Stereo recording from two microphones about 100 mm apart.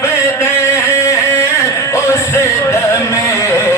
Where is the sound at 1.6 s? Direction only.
30° left (ahead or behind).